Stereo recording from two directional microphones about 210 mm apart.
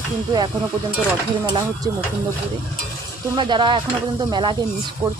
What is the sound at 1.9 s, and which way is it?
Speech, 20° right (ahead or behind).